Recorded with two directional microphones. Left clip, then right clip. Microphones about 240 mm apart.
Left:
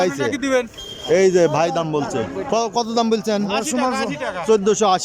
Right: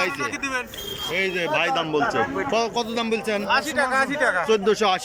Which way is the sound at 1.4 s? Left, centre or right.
Left.